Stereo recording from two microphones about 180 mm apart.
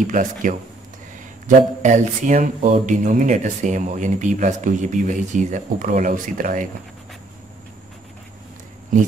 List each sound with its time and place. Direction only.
0.0 s speech: 45° right (ahead or behind)
1.8 s speech: 40° right (ahead or behind)